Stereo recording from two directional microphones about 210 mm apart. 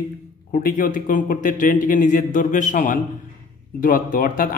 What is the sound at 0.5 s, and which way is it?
A man's voice, 45° left (ahead or behind).